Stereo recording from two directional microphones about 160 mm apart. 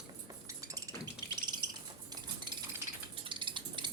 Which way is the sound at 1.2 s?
25° right (ahead or behind).